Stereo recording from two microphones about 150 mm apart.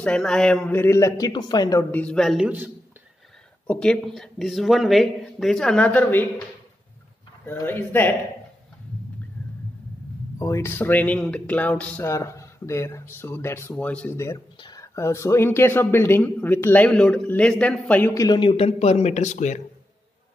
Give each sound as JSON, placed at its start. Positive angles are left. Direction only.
{"t": 0.0, "sound": "speech", "side_deg": 5}
{"t": 1.9, "sound": "a man's voice", "side_deg": 10}
{"t": 2.4, "sound": "a man's voice", "side_deg": -10}
{"t": 3.6, "sound": "a man's voice", "side_deg": 5}
{"t": 7.4, "sound": "speech", "side_deg": 15}
{"t": 10.4, "sound": "speech", "side_deg": 20}
{"t": 12.1, "sound": "speech", "side_deg": 20}
{"t": 18.2, "sound": "speech", "side_deg": 30}